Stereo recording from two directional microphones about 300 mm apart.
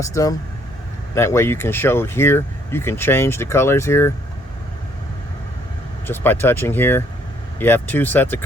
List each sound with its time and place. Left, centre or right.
0.0 s speech: centre
6.1 s speech: centre